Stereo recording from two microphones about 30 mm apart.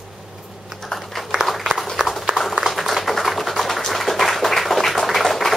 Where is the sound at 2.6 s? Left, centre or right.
Centre.